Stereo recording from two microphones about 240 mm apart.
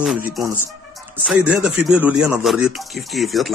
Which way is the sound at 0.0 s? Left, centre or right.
Centre.